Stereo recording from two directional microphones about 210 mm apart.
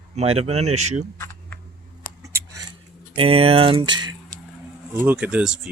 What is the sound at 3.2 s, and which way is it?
Speech, 25° right (ahead or behind).